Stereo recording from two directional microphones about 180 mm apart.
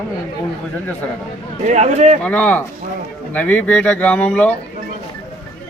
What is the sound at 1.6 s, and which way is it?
Speech, 40° right (ahead or behind).